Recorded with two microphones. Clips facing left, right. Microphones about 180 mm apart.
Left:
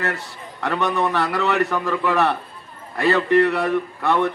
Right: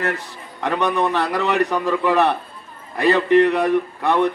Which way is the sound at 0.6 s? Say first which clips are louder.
Right 2 dB; 15° right (ahead or behind).